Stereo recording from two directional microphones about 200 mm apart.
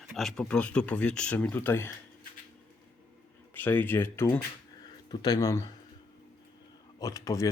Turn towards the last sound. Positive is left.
turn(degrees=15)  # may be behind; listen again after turning